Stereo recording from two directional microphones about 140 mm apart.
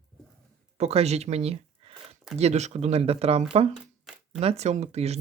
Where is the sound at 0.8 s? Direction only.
50° right (ahead or behind).